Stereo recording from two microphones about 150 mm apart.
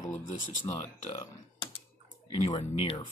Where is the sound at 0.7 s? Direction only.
50° left (ahead or behind).